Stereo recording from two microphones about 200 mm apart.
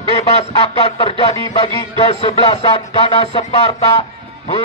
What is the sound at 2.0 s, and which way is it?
Speech, 30° left (ahead or behind).